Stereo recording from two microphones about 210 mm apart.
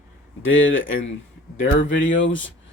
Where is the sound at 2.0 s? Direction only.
65° left (ahead or behind).